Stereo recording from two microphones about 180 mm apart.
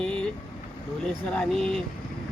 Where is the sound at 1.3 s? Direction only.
5° left (ahead or behind).